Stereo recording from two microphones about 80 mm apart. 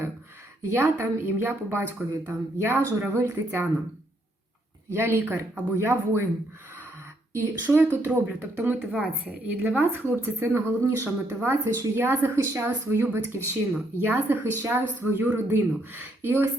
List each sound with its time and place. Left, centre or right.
0.7 s speech: right
4.9 s speech: right
7.3 s speech: right